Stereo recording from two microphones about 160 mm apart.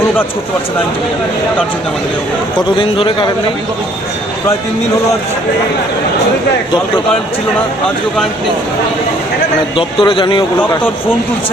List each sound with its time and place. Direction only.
2.7 s speech: 30° left (ahead or behind)
9.7 s speech: 30° left (ahead or behind)